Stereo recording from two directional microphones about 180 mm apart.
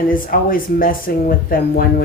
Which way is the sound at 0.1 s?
50° left (ahead or behind).